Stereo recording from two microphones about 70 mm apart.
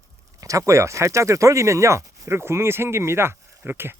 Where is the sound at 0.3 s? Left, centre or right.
Right.